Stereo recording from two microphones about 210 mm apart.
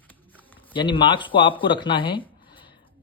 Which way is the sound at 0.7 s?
25° left (ahead or behind).